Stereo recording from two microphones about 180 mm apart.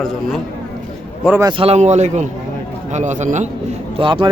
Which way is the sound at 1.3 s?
25° right (ahead or behind).